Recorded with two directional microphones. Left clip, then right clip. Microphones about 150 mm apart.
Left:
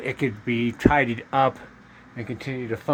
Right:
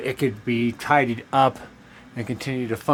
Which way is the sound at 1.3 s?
15° right (ahead or behind).